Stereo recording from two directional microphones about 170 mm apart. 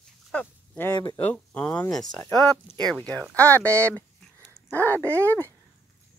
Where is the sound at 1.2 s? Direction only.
10° left (ahead or behind).